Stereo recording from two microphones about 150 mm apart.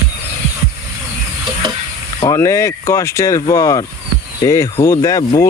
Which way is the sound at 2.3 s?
20° left (ahead or behind).